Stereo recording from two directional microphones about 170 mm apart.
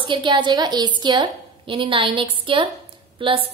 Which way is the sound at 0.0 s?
30° right (ahead or behind).